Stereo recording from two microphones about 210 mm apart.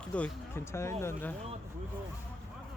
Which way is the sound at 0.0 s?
5° left (ahead or behind).